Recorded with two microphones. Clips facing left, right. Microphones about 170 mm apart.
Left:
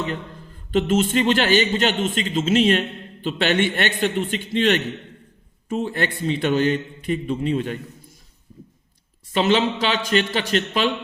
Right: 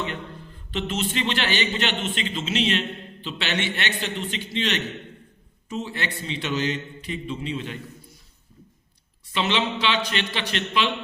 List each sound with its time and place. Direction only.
0.7 s a man's voice: 50° left (ahead or behind)
9.3 s a man's voice: 45° left (ahead or behind)